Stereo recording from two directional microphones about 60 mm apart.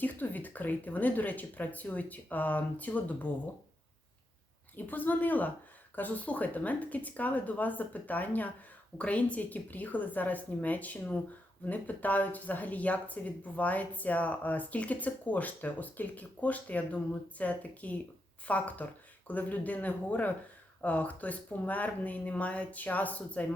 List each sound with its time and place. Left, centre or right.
0.0 s speech: left
4.9 s speech: left